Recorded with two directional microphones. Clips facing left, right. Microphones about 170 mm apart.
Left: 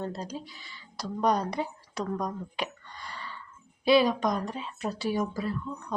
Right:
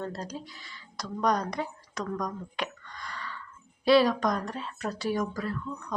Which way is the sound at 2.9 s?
30° left (ahead or behind).